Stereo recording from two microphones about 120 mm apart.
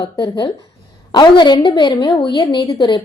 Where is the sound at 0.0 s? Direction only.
35° left (ahead or behind).